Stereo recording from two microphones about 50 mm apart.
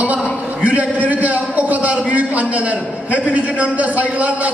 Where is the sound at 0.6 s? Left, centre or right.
Right.